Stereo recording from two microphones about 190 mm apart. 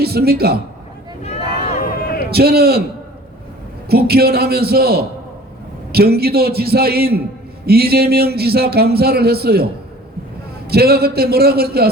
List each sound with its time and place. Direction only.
0.0 s a man's voice: 55° right (ahead or behind)
1.6 s a sound: 35° left (ahead or behind)
2.3 s a man's voice: 55° right (ahead or behind)
3.8 s a man's voice: 55° right (ahead or behind)
10.7 s a man's voice: 55° right (ahead or behind)